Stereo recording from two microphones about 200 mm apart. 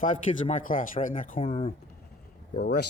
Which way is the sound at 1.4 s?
30° left (ahead or behind).